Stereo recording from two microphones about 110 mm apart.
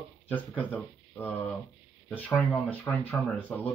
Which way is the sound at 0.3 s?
15° left (ahead or behind).